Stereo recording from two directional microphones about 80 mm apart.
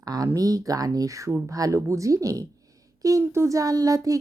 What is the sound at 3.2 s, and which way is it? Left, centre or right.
Speech, right.